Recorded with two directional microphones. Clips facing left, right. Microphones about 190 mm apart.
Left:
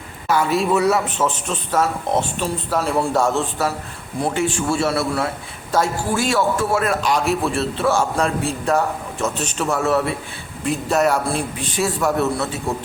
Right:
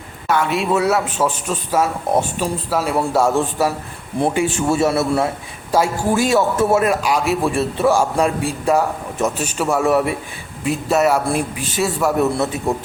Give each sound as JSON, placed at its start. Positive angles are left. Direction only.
{"t": 0.3, "sound": "a man's voice", "side_deg": 0}
{"t": 7.0, "sound": "a man's voice", "side_deg": -5}
{"t": 12.1, "sound": "a man's voice", "side_deg": -15}